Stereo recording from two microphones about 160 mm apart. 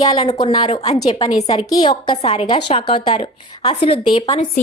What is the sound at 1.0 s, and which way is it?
Speech, 40° left (ahead or behind).